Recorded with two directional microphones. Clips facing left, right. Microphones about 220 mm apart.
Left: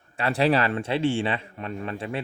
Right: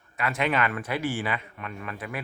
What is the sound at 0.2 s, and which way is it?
Speech, 35° left (ahead or behind).